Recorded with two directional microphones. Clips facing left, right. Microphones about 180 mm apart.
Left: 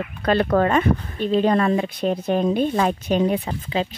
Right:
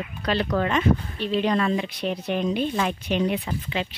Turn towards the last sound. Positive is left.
turn(degrees=40)  # may be behind; listen again after turning